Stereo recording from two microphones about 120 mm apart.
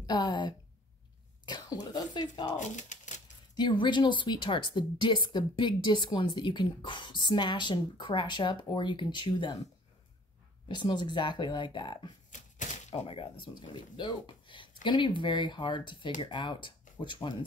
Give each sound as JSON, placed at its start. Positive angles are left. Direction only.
{"t": 0.0, "sound": "a woman's voice", "side_deg": 40}
{"t": 2.6, "sound": "speech", "side_deg": 90}
{"t": 3.5, "sound": "a woman's voice", "side_deg": 40}
{"t": 10.7, "sound": "a woman's voice", "side_deg": 40}
{"t": 12.3, "sound": "a sound", "side_deg": 90}
{"t": 12.9, "sound": "a woman's voice", "side_deg": 50}